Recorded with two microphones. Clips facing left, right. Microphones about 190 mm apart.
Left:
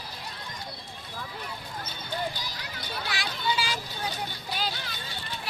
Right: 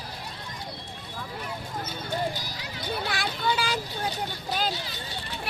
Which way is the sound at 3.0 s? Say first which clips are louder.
Right 1 dB; 55° right (ahead or behind).